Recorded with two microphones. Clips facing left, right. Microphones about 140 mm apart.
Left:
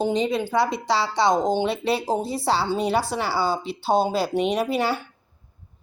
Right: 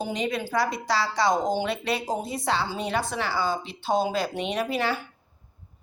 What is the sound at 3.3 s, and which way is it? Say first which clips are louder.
Speech: left 3 dB; 35° left (ahead or behind).